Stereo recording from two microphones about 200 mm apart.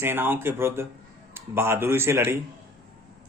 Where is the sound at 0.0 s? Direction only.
10° right (ahead or behind).